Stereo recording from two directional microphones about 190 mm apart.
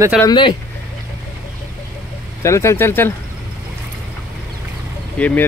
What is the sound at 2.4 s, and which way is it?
Speech, 15° left (ahead or behind).